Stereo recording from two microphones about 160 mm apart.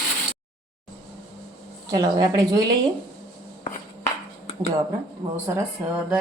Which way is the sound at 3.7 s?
45° left (ahead or behind).